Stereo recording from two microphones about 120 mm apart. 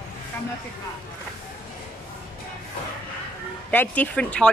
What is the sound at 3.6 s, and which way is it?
Speech, 10° left (ahead or behind).